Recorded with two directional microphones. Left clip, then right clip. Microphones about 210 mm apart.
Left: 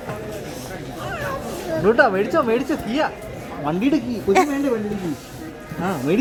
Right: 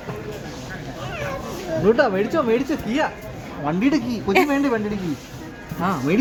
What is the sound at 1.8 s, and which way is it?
Speech, 10° right (ahead or behind).